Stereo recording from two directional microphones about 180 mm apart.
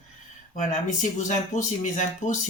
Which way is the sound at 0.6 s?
45° left (ahead or behind).